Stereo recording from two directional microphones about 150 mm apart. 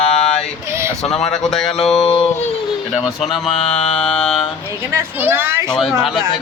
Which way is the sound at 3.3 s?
Centre (ahead or behind).